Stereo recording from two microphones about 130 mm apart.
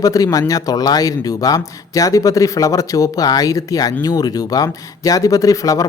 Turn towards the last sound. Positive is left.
turn(degrees=25)  # may be behind; listen again after turning